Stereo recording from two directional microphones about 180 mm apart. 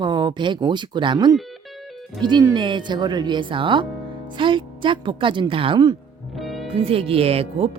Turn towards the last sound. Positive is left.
turn(degrees=-35)  # may be behind; listen again after turning